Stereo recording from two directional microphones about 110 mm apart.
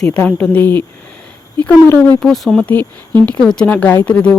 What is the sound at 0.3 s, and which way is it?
Speech, 15° left (ahead or behind).